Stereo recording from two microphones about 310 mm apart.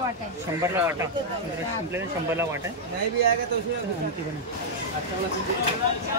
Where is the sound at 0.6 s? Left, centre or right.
Centre.